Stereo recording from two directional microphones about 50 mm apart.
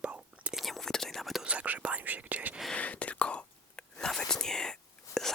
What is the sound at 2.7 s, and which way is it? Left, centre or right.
Whispering, left.